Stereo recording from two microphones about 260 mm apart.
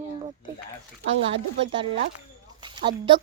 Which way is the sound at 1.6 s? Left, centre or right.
Right.